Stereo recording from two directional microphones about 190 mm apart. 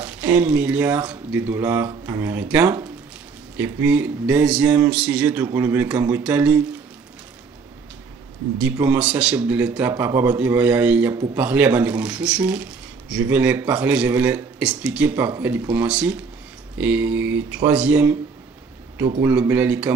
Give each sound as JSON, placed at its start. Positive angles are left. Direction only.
{"t": 0.0, "sound": "speech", "side_deg": -10}
{"t": 8.8, "sound": "speech", "side_deg": -5}
{"t": 19.2, "sound": "speech", "side_deg": -10}